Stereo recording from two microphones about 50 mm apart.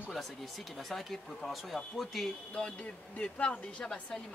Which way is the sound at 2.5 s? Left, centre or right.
Left.